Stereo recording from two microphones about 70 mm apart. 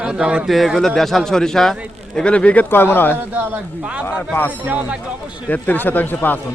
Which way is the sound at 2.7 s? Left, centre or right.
Left.